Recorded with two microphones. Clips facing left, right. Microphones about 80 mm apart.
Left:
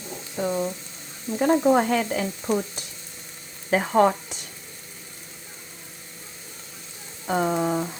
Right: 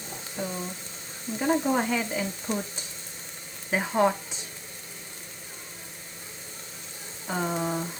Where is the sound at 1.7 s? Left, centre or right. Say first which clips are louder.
Left 5 dB; left.